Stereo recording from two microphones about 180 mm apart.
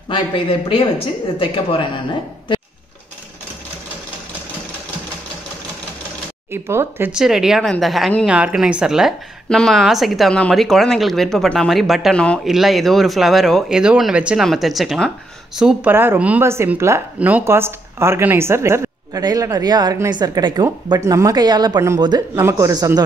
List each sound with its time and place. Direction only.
0.1 s speech: 30° left (ahead or behind)
6.5 s speech: 15° right (ahead or behind)